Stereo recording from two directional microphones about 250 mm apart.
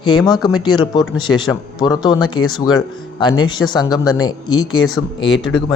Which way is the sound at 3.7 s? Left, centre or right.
Centre.